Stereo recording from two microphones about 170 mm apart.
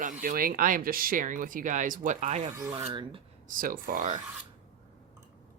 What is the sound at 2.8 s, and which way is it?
Speech, 30° right (ahead or behind).